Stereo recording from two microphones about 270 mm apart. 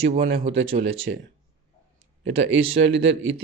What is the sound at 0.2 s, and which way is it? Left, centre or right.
Speech, right.